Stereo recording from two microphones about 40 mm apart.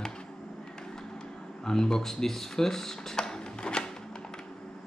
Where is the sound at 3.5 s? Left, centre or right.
Left.